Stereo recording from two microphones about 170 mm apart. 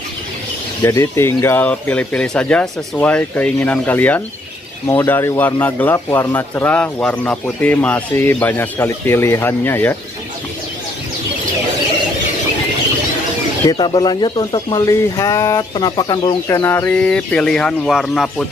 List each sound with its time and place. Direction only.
0.8 s speech: 15° left (ahead or behind)
13.7 s speech: 25° left (ahead or behind); by 18.3 s centre (ahead or behind)